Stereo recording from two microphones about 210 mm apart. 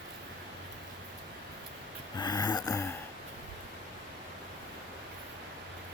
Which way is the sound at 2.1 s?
20° left (ahead or behind).